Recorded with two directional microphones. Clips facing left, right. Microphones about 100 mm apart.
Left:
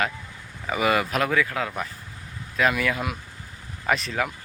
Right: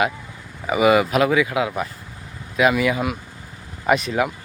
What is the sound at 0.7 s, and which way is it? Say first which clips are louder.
Speech: right 7 dB; 5° right (ahead or behind).